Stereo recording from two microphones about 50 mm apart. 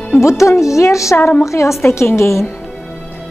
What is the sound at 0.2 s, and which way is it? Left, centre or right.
A woman's voice, left.